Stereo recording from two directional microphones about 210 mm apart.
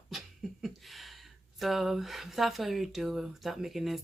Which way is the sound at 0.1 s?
Centre (ahead or behind).